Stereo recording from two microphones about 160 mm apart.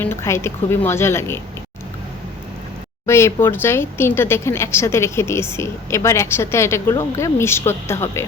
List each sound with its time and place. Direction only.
0.0 s speech: 15° left (ahead or behind)
3.1 s speech: 15° left (ahead or behind)